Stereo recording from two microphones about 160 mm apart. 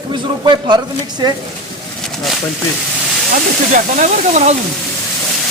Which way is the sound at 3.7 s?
50° right (ahead or behind).